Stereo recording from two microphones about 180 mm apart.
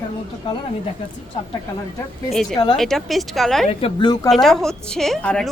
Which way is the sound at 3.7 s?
30° left (ahead or behind).